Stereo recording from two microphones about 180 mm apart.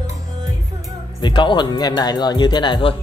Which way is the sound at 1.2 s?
25° left (ahead or behind).